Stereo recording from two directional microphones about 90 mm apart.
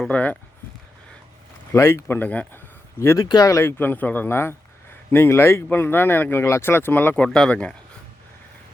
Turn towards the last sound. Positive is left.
turn(degrees=15)  # may be behind; listen again after turning